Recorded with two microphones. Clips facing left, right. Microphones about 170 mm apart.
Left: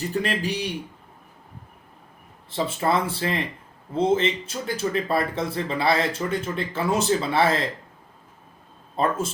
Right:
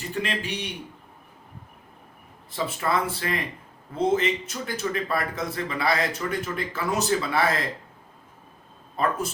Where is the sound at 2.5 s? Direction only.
30° left (ahead or behind).